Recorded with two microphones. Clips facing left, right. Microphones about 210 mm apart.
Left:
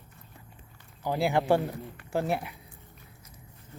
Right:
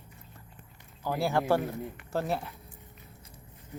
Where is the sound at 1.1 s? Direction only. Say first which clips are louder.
Left 2 dB; 15° left (ahead or behind).